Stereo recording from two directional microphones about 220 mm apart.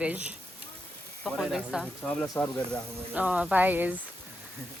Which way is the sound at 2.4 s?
15° left (ahead or behind).